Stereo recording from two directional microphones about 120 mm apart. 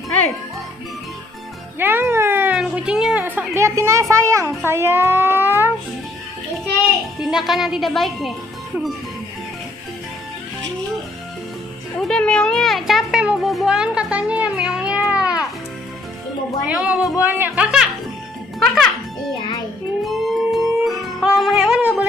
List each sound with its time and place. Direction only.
1.8 s music: 20° right (ahead or behind)
2.5 s a child's voice: 5° right (ahead or behind)
7.2 s speech: 5° right (ahead or behind)
12.0 s a sound: 5° left (ahead or behind)
16.6 s speech: 10° right (ahead or behind)
20.0 s music: centre (ahead or behind)